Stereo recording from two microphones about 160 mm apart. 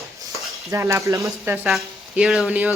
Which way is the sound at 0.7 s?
15° right (ahead or behind).